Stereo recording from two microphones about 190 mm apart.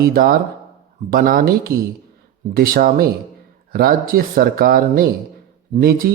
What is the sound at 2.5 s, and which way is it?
Speech, 50° right (ahead or behind).